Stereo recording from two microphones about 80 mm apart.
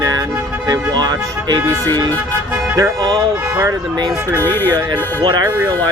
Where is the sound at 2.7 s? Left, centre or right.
Right.